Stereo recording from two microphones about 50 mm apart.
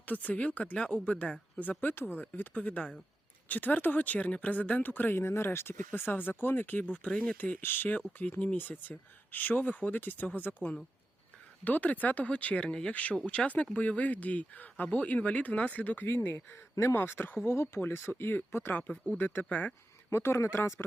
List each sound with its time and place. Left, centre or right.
0.0 s speech: left
1.8 s speech: left
2.6 s speech: left
6.9 s speech: left
7.6 s speech: left
7.9 s speech: left
16.0 s speech: left
17.7 s speech: left
18.7 s speech: left
20.1 s a man's voice: left